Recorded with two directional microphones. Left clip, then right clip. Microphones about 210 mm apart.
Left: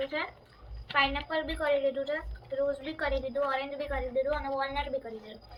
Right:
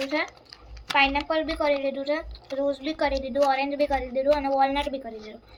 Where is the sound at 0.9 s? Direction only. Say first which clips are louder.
Right 6 dB; 55° right (ahead or behind).